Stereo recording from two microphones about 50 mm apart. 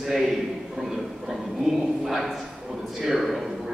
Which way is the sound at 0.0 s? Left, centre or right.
Centre.